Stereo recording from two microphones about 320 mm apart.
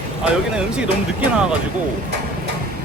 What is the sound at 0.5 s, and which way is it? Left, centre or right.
Speech, centre.